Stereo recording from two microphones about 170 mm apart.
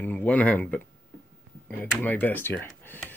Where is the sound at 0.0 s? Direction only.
10° left (ahead or behind).